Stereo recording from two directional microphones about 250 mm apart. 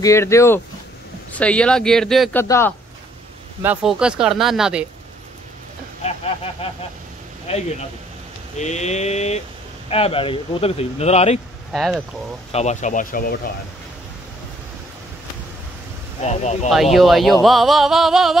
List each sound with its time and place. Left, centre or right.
0.0 s speech: centre
2.4 s speech: centre
3.6 s speech: centre
6.0 s speech: left
11.7 s speech: centre
12.5 s speech: left
16.2 s speech: left
16.6 s speech: centre